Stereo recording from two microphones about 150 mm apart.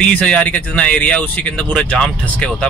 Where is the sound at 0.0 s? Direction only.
5° left (ahead or behind).